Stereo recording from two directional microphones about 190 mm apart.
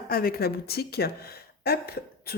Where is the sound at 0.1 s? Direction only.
50° left (ahead or behind).